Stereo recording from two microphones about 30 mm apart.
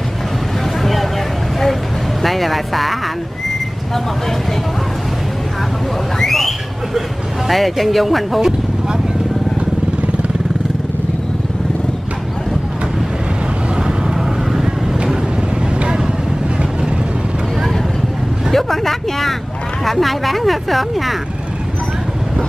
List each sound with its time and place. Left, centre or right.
2.2 s speech: centre
6.1 s a sound: centre
7.4 s speech: centre
8.4 s speech: centre
13.8 s vehicle: centre
18.5 s speech: centre